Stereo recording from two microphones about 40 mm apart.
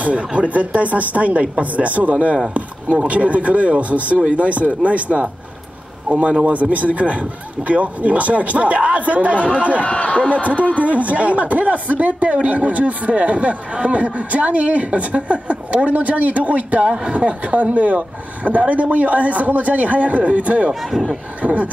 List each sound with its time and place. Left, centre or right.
0.0 s a man's voice: right
6.4 s a man's voice: right
9.8 s speech: left
10.8 s a man's voice: right
20.9 s speech: centre
21.4 s a man's voice: right